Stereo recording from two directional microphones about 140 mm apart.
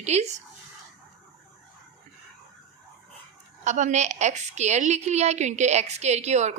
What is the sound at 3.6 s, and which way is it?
A woman's voice, 60° right (ahead or behind).